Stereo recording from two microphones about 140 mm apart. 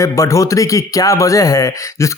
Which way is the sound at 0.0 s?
20° left (ahead or behind).